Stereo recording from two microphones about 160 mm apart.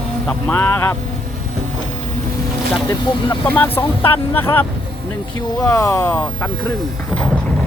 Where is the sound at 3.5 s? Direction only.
10° left (ahead or behind).